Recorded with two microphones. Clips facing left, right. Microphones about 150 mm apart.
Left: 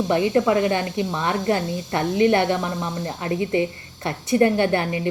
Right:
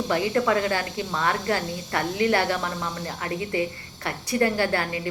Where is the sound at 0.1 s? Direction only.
25° left (ahead or behind).